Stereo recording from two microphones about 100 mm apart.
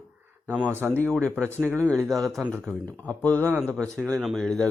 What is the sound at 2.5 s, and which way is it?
Speech, 5° left (ahead or behind).